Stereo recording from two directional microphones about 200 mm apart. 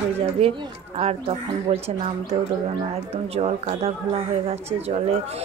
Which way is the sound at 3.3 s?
30° right (ahead or behind).